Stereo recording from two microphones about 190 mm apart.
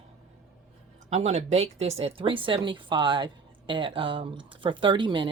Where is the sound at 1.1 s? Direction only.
35° right (ahead or behind).